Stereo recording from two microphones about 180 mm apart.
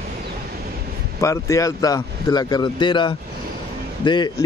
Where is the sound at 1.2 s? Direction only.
15° left (ahead or behind).